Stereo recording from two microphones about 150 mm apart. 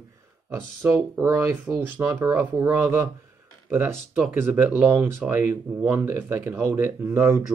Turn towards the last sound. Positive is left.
turn(degrees=-15)  # may be behind; listen again after turning